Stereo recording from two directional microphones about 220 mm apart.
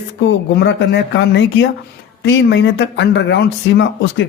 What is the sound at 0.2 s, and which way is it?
Speech, 55° left (ahead or behind).